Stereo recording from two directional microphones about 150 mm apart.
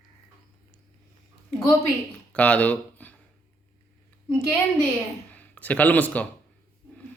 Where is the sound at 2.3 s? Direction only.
10° left (ahead or behind).